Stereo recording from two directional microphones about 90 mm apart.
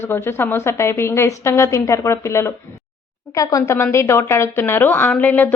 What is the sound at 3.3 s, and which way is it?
Speech, 40° left (ahead or behind).